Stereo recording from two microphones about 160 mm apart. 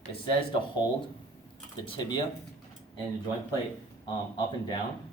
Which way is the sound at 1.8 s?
30° left (ahead or behind).